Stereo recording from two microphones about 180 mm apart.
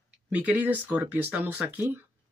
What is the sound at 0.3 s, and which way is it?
Speech, 10° right (ahead or behind).